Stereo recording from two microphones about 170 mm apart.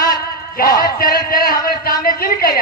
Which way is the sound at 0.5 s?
60° left (ahead or behind).